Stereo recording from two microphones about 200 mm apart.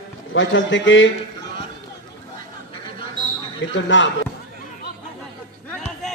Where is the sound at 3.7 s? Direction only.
65° left (ahead or behind).